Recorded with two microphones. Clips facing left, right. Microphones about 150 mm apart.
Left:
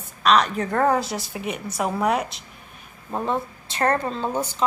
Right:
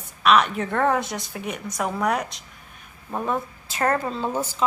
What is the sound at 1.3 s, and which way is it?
Speech, 20° left (ahead or behind).